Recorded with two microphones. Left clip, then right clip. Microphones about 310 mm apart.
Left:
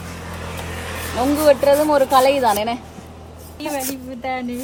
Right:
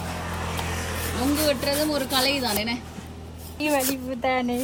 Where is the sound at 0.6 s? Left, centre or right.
Centre.